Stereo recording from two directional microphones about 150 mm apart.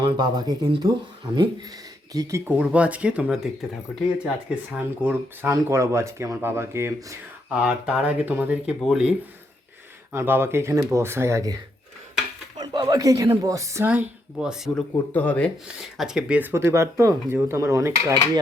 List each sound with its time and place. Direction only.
0.0 s speech: 30° right (ahead or behind)
2.5 s speech: 10° right (ahead or behind)
10.1 s speech: 15° right (ahead or behind)
15.1 s speech: 10° left (ahead or behind)
15.6 s speech: 5° right (ahead or behind)